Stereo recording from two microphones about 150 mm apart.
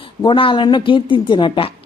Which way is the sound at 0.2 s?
35° left (ahead or behind).